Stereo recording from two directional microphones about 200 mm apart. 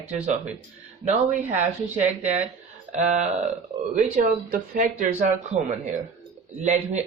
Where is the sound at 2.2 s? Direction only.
35° right (ahead or behind).